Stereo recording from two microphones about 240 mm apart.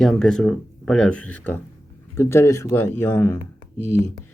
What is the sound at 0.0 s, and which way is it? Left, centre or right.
Speech, centre.